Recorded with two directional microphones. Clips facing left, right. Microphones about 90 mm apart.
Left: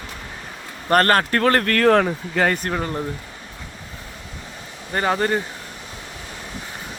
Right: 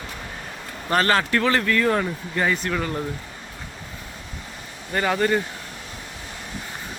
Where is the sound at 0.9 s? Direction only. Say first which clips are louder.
Left 3 dB; 50° left (ahead or behind); by 2.6 s 65° left (ahead or behind).